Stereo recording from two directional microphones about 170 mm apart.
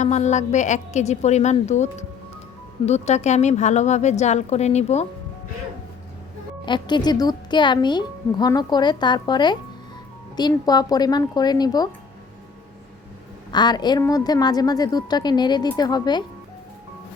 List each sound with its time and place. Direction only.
0.0 s a woman's voice: 40° left (ahead or behind)
6.7 s a woman's voice: 25° left (ahead or behind)
13.5 s a woman's voice: 25° left (ahead or behind)